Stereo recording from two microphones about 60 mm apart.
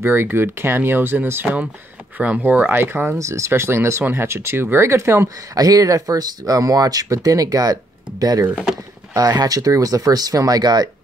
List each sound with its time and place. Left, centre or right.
0.0 s speech: right
3.2 s speech: right
5.5 s speech: right